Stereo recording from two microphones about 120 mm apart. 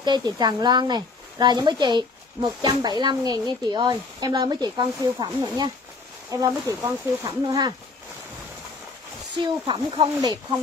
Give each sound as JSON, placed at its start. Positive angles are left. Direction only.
{"t": 0.0, "sound": "speech", "side_deg": -35}
{"t": 9.4, "sound": "speech", "side_deg": -35}